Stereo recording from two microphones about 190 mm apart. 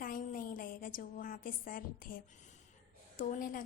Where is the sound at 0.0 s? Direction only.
45° left (ahead or behind).